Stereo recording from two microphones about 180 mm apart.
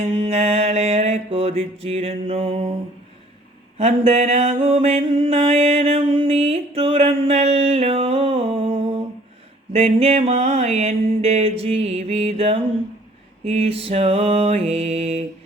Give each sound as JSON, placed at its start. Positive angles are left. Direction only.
{"t": 0.0, "sound": "mantra", "side_deg": -35}
{"t": 3.8, "sound": "mantra", "side_deg": -35}